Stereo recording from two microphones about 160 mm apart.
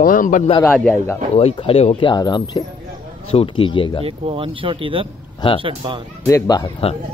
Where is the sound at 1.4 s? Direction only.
35° left (ahead or behind).